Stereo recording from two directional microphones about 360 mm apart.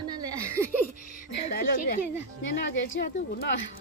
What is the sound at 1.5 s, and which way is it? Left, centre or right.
Speech, left.